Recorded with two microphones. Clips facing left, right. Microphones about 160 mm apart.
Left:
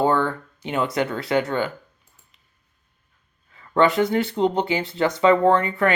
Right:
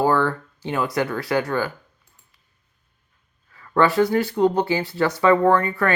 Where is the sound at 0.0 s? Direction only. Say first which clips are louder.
Right 1 dB; 25° left (ahead or behind).